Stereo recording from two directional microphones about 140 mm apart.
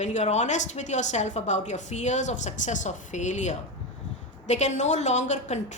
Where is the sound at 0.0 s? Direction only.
55° left (ahead or behind).